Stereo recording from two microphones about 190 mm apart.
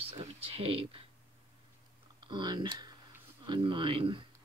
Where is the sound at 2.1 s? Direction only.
25° right (ahead or behind).